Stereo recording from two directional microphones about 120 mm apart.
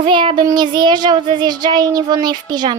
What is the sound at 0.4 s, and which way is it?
A child's voice, 40° right (ahead or behind).